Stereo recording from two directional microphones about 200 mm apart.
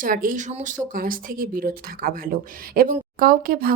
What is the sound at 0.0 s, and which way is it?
Speech, 45° right (ahead or behind).